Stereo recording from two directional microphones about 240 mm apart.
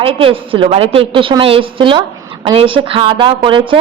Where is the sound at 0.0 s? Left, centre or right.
Right.